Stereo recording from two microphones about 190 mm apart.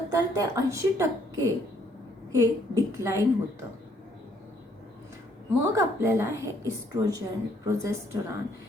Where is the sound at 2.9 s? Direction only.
15° right (ahead or behind).